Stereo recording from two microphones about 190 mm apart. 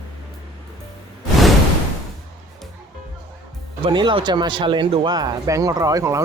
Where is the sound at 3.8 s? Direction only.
25° right (ahead or behind).